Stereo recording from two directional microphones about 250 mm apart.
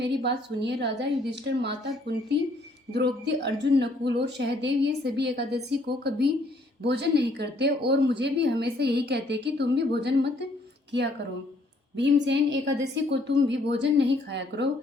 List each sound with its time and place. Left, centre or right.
0.0 s a woman's voice: right
12.2 s a woman's voice: right